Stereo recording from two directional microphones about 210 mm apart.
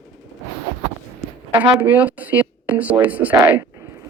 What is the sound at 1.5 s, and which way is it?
Speech, 10° right (ahead or behind).